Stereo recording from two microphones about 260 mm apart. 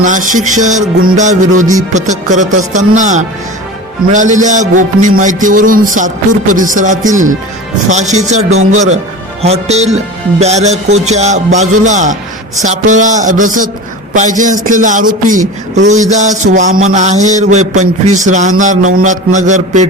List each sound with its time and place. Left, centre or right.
0.0 s a man's voice: right
9.4 s a man's voice: right